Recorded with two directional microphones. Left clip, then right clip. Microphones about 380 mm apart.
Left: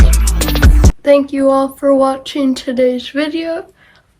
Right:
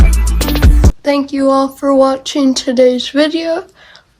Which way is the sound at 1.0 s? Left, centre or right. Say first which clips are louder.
Left 3 dB; centre.